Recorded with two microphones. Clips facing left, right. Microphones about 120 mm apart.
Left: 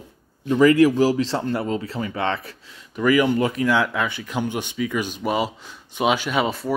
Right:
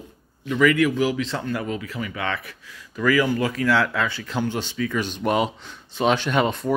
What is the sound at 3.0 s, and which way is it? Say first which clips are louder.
Speech: left 2 dB; 20° left (ahead or behind).